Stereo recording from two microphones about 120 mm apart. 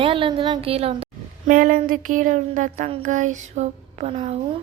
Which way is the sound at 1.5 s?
90° right.